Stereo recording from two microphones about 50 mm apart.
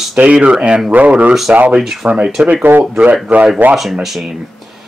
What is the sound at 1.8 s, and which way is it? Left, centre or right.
Speech, centre.